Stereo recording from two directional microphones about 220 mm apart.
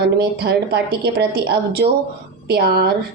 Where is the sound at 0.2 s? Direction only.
45° right (ahead or behind).